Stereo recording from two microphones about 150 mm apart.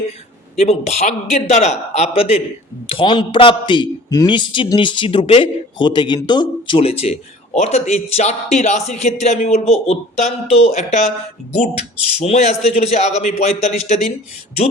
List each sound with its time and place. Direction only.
0.5 s a man's voice: 45° left (ahead or behind)
2.9 s a man's voice: 35° left (ahead or behind)
6.7 s a man's voice: 40° left (ahead or behind)
12.2 s a man's voice: 45° left (ahead or behind)